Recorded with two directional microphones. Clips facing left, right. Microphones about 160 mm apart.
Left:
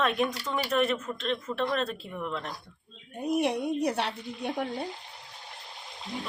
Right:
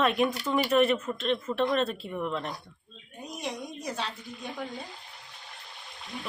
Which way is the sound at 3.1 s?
60° left (ahead or behind).